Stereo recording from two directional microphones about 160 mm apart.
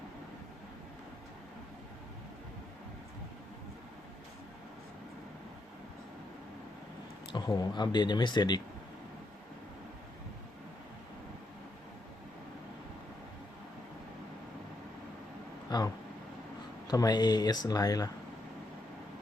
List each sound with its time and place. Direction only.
7.3 s speech: 25° left (ahead or behind)
15.7 s a sound: 25° left (ahead or behind)
16.9 s speech: 25° left (ahead or behind)